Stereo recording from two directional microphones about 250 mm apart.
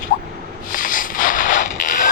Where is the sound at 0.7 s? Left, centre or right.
Left.